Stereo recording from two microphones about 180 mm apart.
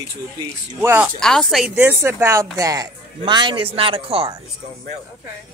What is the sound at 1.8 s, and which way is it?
A man's voice, 15° right (ahead or behind).